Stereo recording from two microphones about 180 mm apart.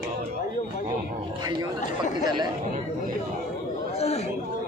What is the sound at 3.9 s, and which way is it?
Speech, 35° left (ahead or behind).